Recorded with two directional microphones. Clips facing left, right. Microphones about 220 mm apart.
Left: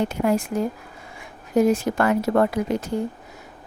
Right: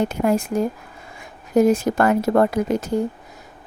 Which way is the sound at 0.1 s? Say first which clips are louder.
Right 2 dB; 45° right (ahead or behind).